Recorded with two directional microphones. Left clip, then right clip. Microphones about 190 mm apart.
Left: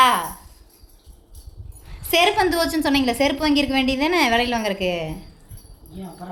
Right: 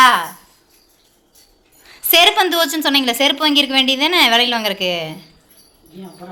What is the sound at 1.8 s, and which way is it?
A woman's voice, 5° right (ahead or behind).